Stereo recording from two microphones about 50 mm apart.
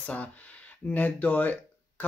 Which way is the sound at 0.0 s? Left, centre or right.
Left.